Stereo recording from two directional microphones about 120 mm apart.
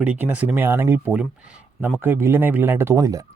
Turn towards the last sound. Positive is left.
turn(degrees=-30)  # may be behind; listen again after turning